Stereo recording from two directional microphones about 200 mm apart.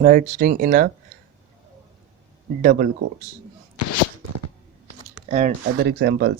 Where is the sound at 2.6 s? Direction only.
45° right (ahead or behind).